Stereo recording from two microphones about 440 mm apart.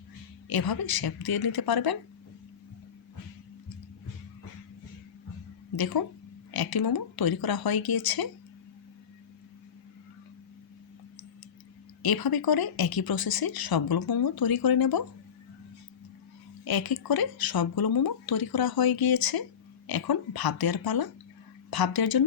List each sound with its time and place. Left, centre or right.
0.4 s speech: left
5.7 s speech: left
12.0 s speech: left
16.6 s speech: left